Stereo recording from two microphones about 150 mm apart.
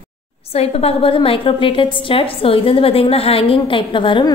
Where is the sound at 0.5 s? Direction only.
40° left (ahead or behind).